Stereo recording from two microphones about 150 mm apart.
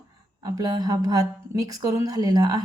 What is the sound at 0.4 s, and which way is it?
A woman's voice, 25° right (ahead or behind).